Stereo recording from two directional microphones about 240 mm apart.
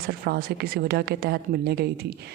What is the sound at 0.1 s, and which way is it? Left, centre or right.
A woman's voice, right.